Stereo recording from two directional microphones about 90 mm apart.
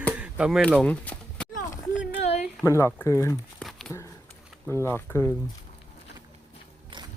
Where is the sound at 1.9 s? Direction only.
5° right (ahead or behind).